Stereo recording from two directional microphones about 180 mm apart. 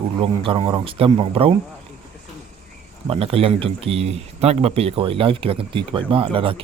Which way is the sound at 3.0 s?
30° right (ahead or behind).